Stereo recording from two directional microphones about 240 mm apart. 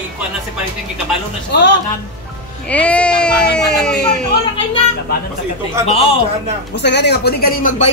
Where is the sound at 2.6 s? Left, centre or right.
Centre.